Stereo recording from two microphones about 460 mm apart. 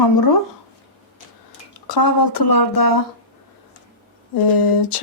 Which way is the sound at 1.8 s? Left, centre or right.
Left.